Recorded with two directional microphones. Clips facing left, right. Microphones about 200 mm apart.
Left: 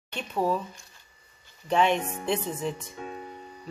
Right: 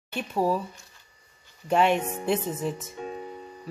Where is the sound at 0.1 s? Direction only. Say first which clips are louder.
Right 2 dB; 10° right (ahead or behind).